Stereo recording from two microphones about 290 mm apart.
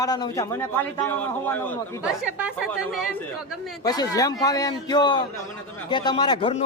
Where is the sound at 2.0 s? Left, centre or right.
Centre.